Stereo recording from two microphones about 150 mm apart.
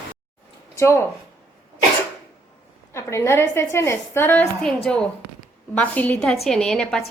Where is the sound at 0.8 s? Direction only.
20° left (ahead or behind).